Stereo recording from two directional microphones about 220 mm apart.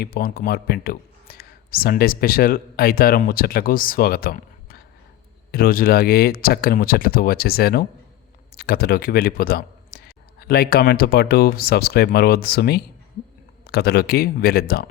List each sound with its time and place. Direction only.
0.0 s speech: 45° left (ahead or behind)